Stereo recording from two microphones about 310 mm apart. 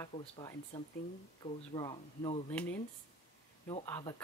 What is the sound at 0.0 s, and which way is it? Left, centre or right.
Speech, centre.